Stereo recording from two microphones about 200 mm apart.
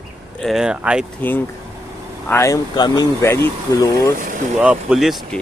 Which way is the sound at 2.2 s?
15° left (ahead or behind).